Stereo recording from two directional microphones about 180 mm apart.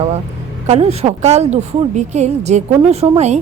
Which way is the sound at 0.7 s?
35° right (ahead or behind).